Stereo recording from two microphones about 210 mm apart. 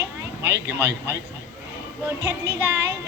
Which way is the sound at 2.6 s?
15° right (ahead or behind).